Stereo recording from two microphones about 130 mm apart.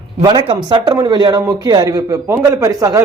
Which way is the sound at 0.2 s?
35° right (ahead or behind).